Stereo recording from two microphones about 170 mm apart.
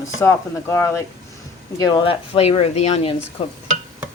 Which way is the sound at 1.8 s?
25° left (ahead or behind).